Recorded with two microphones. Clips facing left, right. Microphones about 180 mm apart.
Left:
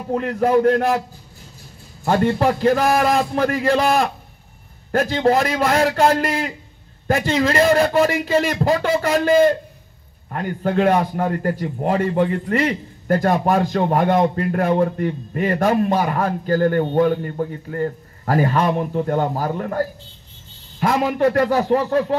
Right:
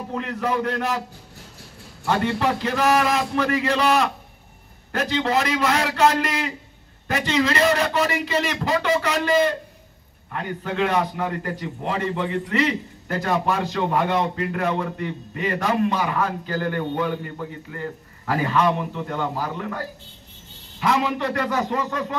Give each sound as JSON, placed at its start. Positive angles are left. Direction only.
{"t": 0.1, "sound": "a man's voice", "side_deg": 45}
{"t": 2.0, "sound": "a man's voice", "side_deg": 45}